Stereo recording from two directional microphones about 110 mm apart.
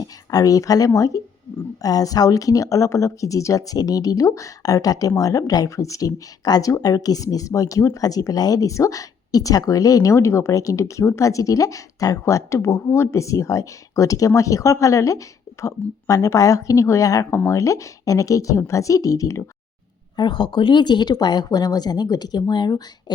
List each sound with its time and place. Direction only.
0.0 s speech: 35° left (ahead or behind)
20.1 s speech: 45° left (ahead or behind)